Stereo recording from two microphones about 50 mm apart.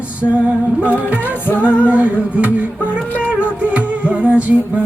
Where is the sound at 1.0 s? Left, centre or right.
Right.